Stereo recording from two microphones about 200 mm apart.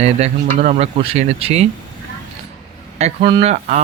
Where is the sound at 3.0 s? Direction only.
25° right (ahead or behind).